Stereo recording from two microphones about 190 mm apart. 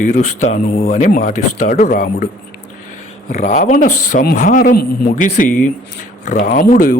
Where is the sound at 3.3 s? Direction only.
45° left (ahead or behind).